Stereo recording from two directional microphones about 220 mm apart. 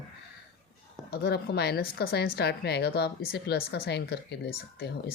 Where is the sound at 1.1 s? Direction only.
45° left (ahead or behind).